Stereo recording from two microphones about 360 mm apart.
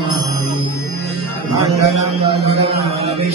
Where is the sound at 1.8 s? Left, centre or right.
Centre.